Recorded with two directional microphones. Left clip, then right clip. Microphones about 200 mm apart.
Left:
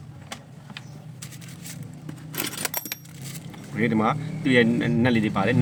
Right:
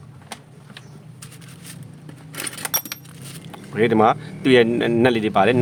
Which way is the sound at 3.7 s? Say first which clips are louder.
Right 8 dB; 55° right (ahead or behind).